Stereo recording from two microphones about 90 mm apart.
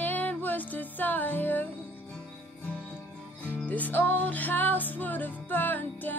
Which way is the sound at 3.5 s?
15° left (ahead or behind).